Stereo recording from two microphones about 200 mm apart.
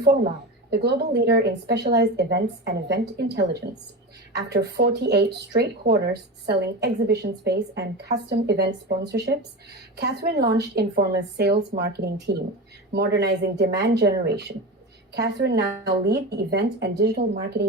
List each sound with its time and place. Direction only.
0.7 s a woman's voice: 55° right (ahead or behind)